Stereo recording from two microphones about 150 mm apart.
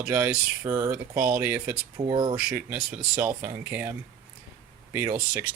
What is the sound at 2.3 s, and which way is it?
Speech, 10° right (ahead or behind).